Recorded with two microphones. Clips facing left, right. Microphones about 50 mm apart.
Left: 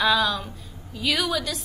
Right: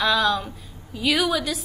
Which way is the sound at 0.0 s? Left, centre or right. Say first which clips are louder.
Right 1 dB; centre.